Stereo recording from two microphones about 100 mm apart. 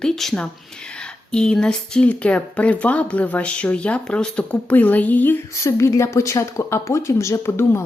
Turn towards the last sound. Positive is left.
turn(degrees=25)  # may be behind; listen again after turning